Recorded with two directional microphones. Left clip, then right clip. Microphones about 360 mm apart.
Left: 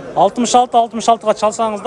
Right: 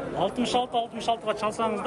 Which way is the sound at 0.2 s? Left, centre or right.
Centre.